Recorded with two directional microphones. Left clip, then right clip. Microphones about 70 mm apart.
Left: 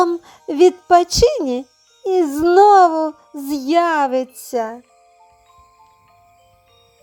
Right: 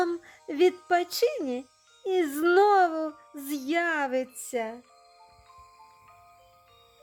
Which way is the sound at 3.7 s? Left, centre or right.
Left.